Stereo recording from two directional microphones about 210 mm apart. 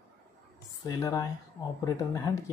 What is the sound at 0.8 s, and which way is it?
Speech, 15° left (ahead or behind).